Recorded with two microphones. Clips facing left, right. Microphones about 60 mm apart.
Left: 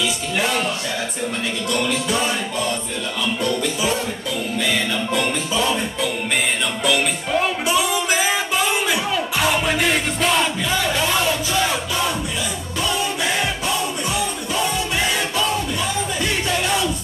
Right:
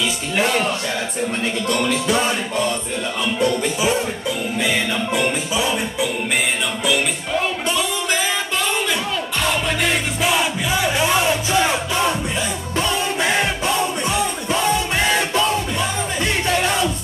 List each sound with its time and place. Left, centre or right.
0.4 s music: right
1.7 s music: right
3.3 s music: right
7.4 s music: centre; by 16.9 s right